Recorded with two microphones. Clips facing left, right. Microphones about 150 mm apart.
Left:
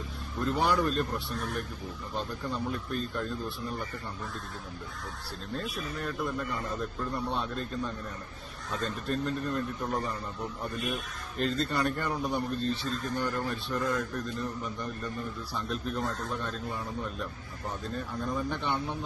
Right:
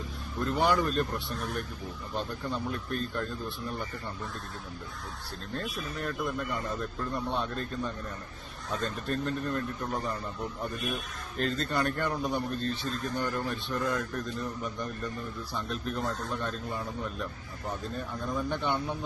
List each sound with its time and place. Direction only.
0.3 s speech: centre (ahead or behind)
5.5 s speech: centre (ahead or behind)
8.7 s speech: centre (ahead or behind)
11.3 s speech: centre (ahead or behind)
15.5 s speech: centre (ahead or behind)
17.9 s speech: centre (ahead or behind)